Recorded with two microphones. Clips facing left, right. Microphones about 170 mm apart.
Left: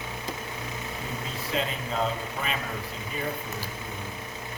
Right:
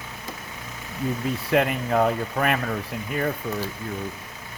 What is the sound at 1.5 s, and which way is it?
Speech, 60° right (ahead or behind).